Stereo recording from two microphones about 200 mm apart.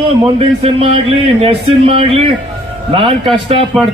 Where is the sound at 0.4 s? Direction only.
30° right (ahead or behind).